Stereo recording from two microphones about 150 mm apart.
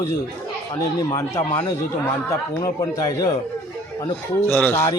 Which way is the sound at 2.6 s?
25° left (ahead or behind).